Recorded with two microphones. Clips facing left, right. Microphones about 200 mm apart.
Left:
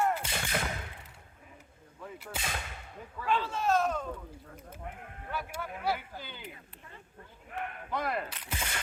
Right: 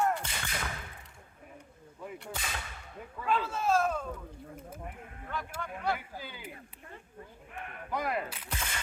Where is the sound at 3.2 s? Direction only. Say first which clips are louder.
Even; 5° right (ahead or behind).